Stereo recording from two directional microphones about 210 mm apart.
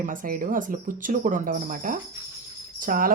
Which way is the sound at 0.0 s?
40° right (ahead or behind).